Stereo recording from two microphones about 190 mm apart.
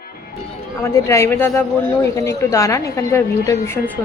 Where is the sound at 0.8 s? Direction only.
15° left (ahead or behind).